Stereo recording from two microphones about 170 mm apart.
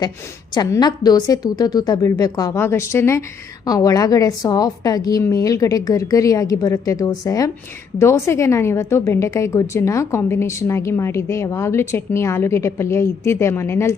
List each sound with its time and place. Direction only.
0.5 s a woman's voice: 25° left (ahead or behind)